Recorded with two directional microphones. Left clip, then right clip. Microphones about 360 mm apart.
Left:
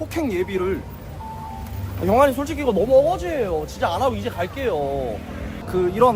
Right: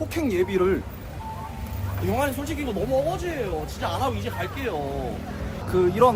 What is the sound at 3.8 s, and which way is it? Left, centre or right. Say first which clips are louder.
Speech: left 6 dB; left.